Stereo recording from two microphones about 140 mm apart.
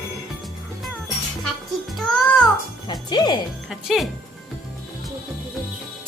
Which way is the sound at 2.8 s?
30° left (ahead or behind).